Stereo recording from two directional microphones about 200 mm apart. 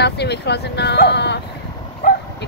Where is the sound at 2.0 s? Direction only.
45° left (ahead or behind).